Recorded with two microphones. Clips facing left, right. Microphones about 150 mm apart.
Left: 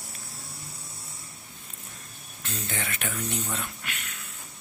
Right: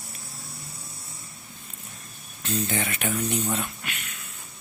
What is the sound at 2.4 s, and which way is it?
Speech, 20° right (ahead or behind).